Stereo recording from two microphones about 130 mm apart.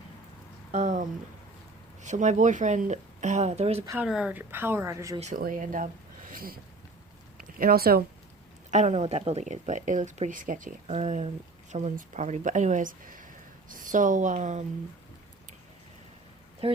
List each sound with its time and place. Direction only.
0.7 s speech: 65° right (ahead or behind)
3.9 s a woman's voice: 5° right (ahead or behind); by 5.1 s 20° right (ahead or behind)
5.2 s speech: 85° right
7.7 s speech: 90° right
8.7 s speech: 60° right (ahead or behind); by 10.9 s 85° right
10.9 s speech: 55° right (ahead or behind)
11.7 s a woman's voice: 70° right (ahead or behind)
16.6 s speech: 45° right (ahead or behind)